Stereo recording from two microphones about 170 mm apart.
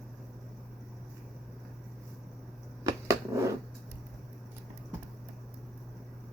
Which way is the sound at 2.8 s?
20° right (ahead or behind).